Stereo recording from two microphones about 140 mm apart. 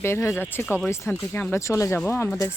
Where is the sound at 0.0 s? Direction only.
20° left (ahead or behind).